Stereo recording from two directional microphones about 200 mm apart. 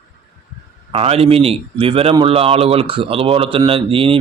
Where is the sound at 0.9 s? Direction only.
30° right (ahead or behind).